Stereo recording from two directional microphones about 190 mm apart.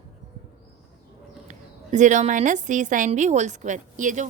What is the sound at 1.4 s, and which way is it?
A woman's voice, 40° right (ahead or behind).